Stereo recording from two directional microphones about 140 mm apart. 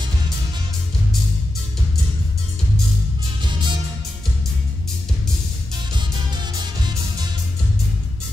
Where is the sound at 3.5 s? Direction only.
35° right (ahead or behind).